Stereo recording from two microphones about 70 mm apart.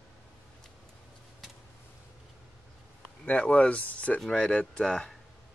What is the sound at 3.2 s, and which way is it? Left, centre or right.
Speech, left.